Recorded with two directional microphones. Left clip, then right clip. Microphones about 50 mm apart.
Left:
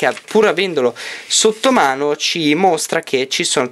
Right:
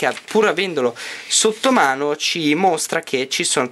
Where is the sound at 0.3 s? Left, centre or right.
Left.